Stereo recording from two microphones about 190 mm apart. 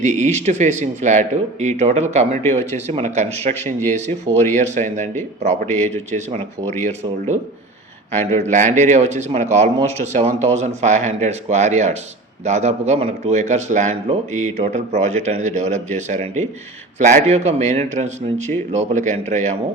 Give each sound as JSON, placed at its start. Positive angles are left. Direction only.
{"t": 0.0, "sound": "speech", "side_deg": -40}